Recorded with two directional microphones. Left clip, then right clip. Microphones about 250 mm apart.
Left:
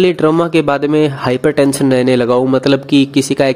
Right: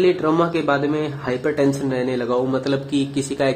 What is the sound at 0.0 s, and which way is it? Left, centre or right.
Speech, left.